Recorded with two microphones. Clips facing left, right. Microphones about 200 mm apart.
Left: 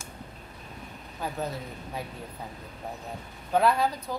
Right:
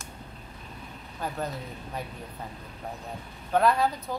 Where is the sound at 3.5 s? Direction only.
Centre (ahead or behind).